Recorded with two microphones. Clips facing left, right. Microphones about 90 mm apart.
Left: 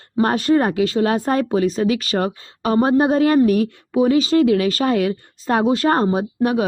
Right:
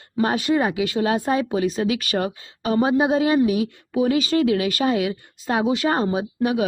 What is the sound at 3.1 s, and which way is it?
A woman's voice, 50° left (ahead or behind).